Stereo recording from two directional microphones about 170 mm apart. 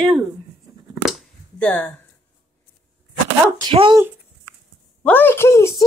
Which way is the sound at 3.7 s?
30° right (ahead or behind).